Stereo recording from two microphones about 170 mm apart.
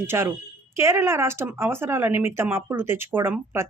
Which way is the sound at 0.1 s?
15° right (ahead or behind).